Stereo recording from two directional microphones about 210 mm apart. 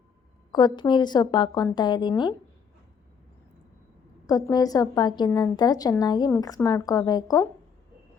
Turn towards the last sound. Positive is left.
turn(degrees=15)  # may be behind; listen again after turning